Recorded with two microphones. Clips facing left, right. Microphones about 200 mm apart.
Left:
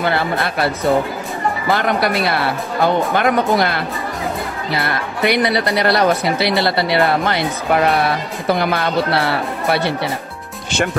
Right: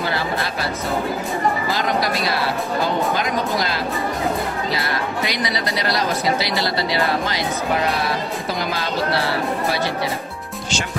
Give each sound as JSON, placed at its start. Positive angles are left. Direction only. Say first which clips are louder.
{"t": 0.0, "sound": "speech", "louder": "left 4 dB", "side_deg": 55}
{"t": 1.7, "sound": "speech", "louder": "left 4 dB", "side_deg": 60}